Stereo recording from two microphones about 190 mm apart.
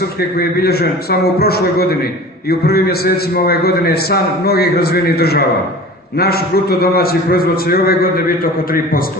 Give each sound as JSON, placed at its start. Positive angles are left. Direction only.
{"t": 0.2, "sound": "a man's voice", "side_deg": 55}